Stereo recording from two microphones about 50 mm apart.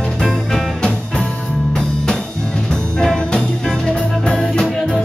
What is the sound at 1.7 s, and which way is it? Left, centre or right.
Music, centre.